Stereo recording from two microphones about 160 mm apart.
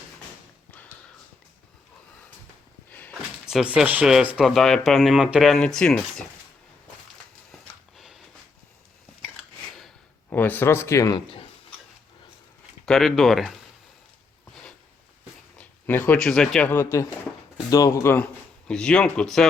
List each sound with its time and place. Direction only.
2.9 s a sound: 10° left (ahead or behind)
3.4 s speech: 5° right (ahead or behind)
7.9 s a sound: centre (ahead or behind)
10.2 s speech: 10° left (ahead or behind)
12.8 s speech: centre (ahead or behind)
15.5 s speech: 10° left (ahead or behind)
18.7 s speech: 5° left (ahead or behind)